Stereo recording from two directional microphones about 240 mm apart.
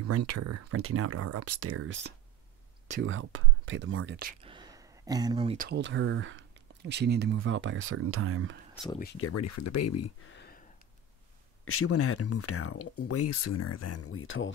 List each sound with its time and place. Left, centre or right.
0.0 s speech: right
3.0 s speech: right
4.4 s a sound: centre
5.6 s speech: right
9.2 s speech: left
10.3 s a sound: left
11.6 s speech: left